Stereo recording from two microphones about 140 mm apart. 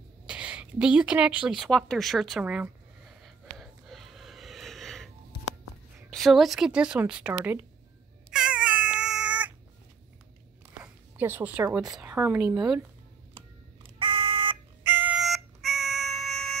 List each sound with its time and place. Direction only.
0.3 s speech: 10° right (ahead or behind)
3.1 s snort: centre (ahead or behind)
6.0 s speech: centre (ahead or behind)
8.3 s cat: 5° right (ahead or behind)
10.8 s a sound: 15° right (ahead or behind)
11.9 s speech: 10° right (ahead or behind)
13.9 s smoke detector: 35° right (ahead or behind)
14.8 s music: 15° right (ahead or behind)
15.1 s siren: centre (ahead or behind)